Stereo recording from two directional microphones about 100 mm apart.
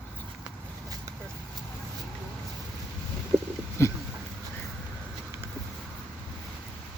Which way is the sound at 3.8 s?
25° left (ahead or behind).